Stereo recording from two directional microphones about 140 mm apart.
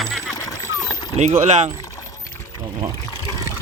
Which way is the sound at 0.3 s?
25° left (ahead or behind).